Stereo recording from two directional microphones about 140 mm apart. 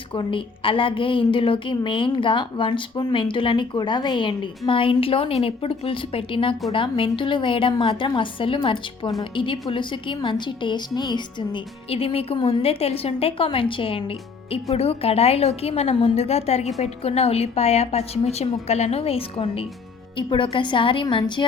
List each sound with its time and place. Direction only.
0.1 s a woman's voice: 40° left (ahead or behind)